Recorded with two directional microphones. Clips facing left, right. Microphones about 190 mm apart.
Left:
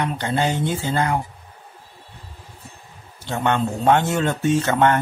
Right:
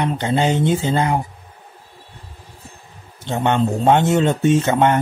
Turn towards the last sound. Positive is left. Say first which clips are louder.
# right 2 dB
turn(degrees=-20)  # may be behind; listen again after turning